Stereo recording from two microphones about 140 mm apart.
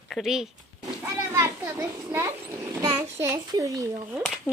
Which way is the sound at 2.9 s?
15° right (ahead or behind).